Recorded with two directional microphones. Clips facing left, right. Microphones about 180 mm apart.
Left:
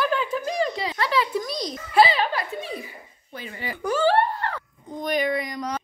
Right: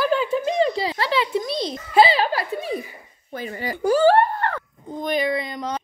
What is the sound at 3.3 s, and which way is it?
Speech, 40° right (ahead or behind).